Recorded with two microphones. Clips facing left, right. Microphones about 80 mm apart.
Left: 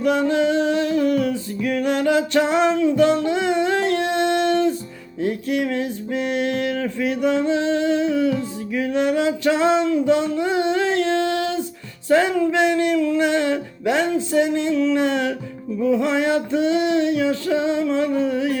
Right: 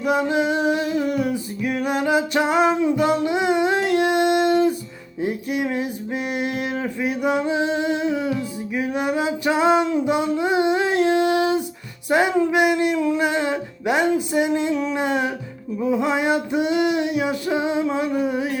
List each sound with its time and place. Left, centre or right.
0.0 s a sound: centre
12.0 s male singing: centre
13.2 s music: centre
16.0 s male singing: centre